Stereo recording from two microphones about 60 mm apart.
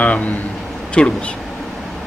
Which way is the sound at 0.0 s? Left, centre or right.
Left.